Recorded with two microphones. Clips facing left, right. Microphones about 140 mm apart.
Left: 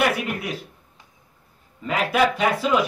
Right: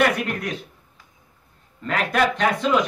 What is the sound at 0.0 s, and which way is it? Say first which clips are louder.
Speech: right 2 dB; 5° left (ahead or behind).